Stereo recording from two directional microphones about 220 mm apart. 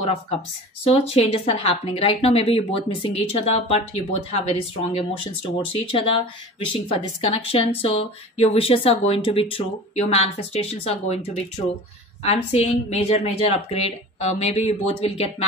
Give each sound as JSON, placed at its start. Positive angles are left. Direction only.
{"t": 0.8, "sound": "speech", "side_deg": 25}